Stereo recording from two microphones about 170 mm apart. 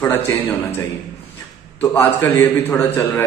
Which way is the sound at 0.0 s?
15° left (ahead or behind).